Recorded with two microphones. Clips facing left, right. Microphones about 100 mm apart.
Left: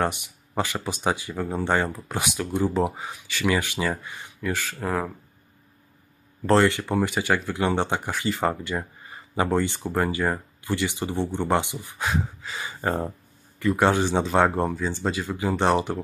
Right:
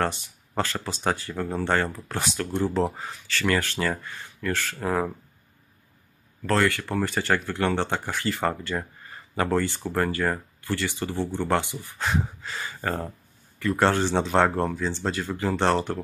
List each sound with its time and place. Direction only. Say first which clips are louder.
0.0 s speech: left 1 dB; 15° left (ahead or behind); by 5.1 s centre (ahead or behind)
6.4 s speech: left 4 dB; 25° left (ahead or behind)
12.1 s a sound: right 1 dB; centre (ahead or behind)
12.5 s speech: left 3 dB; 15° left (ahead or behind)